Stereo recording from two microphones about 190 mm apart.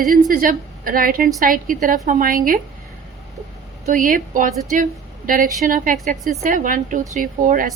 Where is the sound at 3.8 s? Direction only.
45° right (ahead or behind).